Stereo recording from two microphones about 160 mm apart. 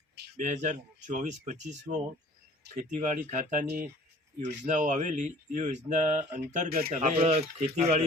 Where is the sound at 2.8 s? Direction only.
50° right (ahead or behind).